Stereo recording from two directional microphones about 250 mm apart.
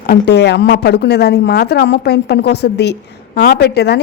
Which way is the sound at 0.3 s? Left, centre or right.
Left.